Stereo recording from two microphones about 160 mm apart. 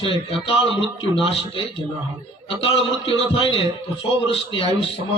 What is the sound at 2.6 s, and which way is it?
A man's voice, 35° left (ahead or behind).